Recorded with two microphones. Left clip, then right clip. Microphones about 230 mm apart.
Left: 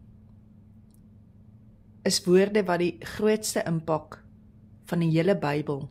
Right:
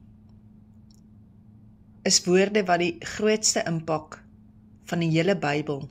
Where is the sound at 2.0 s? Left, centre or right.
Left.